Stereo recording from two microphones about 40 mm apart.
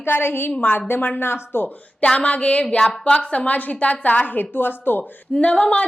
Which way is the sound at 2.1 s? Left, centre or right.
Left.